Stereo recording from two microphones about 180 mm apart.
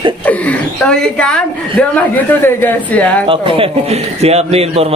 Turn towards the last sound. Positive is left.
turn(degrees=-35)  # may be behind; listen again after turning